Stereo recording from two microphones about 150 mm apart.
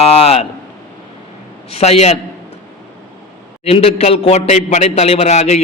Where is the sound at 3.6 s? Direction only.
40° left (ahead or behind).